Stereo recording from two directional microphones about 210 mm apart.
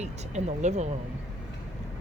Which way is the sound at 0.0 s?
30° right (ahead or behind).